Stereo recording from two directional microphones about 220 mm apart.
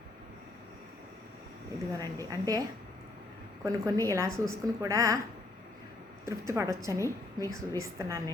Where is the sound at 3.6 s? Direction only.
15° right (ahead or behind).